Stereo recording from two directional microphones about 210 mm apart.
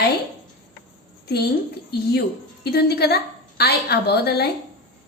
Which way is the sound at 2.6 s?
50° left (ahead or behind).